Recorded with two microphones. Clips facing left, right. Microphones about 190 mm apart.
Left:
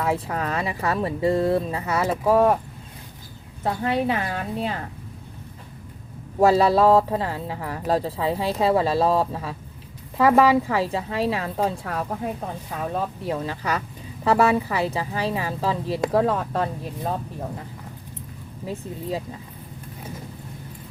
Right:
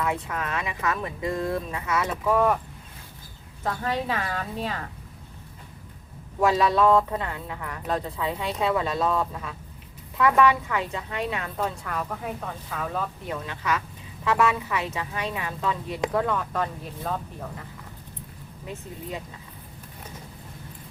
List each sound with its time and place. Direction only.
0.0 s a woman's voice: 35° left (ahead or behind)
4.1 s a woman's voice: 25° left (ahead or behind)
6.4 s a woman's voice: 35° left (ahead or behind)
18.6 s a woman's voice: 35° left (ahead or behind)